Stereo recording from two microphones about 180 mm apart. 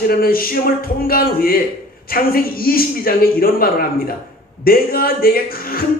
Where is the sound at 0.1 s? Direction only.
55° left (ahead or behind).